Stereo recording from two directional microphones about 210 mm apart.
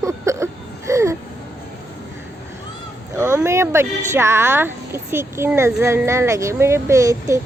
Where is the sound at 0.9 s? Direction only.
15° right (ahead or behind).